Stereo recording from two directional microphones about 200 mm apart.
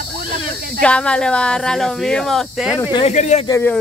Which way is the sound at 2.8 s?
25° left (ahead or behind).